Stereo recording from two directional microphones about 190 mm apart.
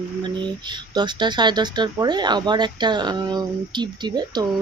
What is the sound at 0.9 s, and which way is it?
Speech, 25° right (ahead or behind).